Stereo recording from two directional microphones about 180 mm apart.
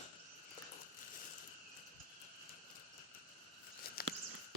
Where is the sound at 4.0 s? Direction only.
60° left (ahead or behind).